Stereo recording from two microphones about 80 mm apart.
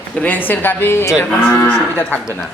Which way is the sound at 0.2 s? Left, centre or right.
Left.